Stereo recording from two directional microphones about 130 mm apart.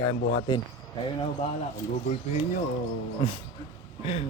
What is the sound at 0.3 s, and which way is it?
Speech, 40° left (ahead or behind).